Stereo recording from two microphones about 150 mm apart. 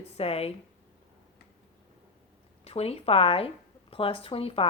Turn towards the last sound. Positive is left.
turn(degrees=40)  # may be behind; listen again after turning